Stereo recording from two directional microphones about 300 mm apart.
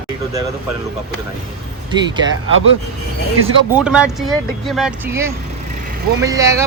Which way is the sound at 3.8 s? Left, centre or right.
Centre.